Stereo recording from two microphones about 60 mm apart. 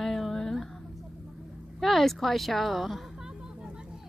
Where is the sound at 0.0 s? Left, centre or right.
Centre.